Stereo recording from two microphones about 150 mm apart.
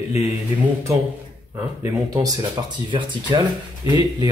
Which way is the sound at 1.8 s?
25° right (ahead or behind).